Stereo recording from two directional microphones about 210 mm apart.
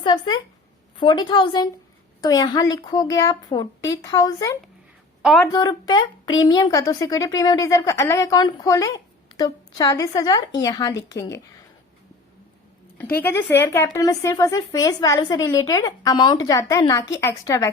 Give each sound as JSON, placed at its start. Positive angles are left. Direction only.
{"t": 0.0, "sound": "a woman's voice", "side_deg": 20}
{"t": 5.2, "sound": "speech", "side_deg": 0}
{"t": 5.5, "sound": "a woman's voice", "side_deg": 20}
{"t": 13.0, "sound": "a woman's voice", "side_deg": 10}